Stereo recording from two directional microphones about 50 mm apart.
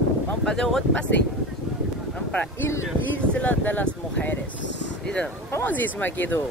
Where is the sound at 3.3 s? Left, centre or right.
Left.